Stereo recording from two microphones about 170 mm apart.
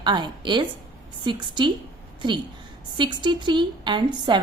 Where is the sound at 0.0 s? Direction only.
25° right (ahead or behind).